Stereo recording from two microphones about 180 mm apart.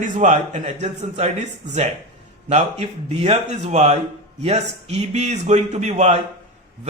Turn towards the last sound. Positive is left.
turn(degrees=-40)  # may be behind; listen again after turning